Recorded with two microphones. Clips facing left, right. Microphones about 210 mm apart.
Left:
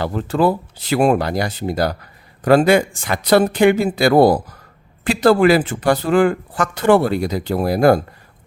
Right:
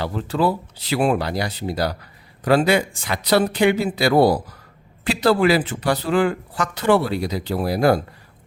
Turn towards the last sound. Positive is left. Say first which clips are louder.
# left 4 dB
turn(degrees=50)  # may be behind; listen again after turning